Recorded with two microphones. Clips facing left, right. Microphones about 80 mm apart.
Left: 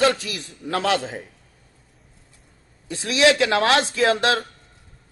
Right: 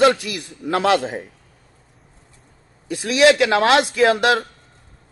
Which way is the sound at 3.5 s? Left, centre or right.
Right.